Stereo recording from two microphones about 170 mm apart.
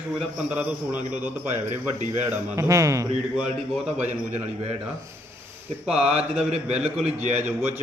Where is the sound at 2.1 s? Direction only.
15° right (ahead or behind).